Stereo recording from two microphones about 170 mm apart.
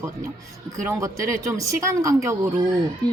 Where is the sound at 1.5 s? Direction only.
20° right (ahead or behind).